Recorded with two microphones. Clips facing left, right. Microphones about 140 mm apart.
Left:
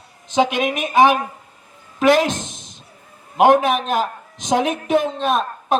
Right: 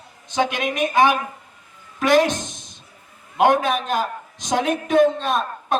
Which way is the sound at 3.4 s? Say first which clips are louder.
Left 4 dB; 20° left (ahead or behind).